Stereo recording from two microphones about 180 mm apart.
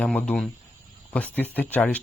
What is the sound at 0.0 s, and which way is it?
Speech, 5° left (ahead or behind).